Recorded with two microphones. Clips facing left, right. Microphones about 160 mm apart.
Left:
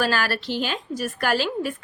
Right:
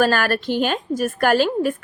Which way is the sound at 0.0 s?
50° right (ahead or behind).